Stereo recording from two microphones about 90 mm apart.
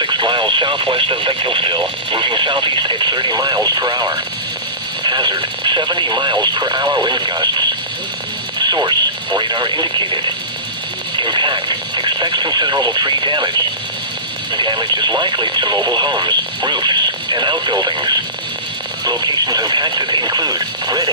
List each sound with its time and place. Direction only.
0.0 s speech: 60° right (ahead or behind)
11.2 s speech: 60° right (ahead or behind)
14.5 s speech: 60° right (ahead or behind)